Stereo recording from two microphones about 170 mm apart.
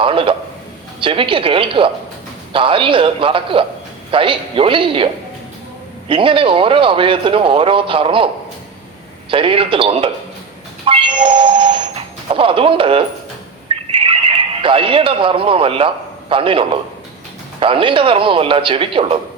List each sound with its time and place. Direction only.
0.0 s a man's voice: 30° right (ahead or behind)
6.1 s a man's voice: 30° right (ahead or behind)
9.3 s a man's voice: 30° right (ahead or behind)
10.8 s a sound: 30° right (ahead or behind)
13.7 s neigh: 30° right (ahead or behind)
16.3 s a man's voice: 30° right (ahead or behind)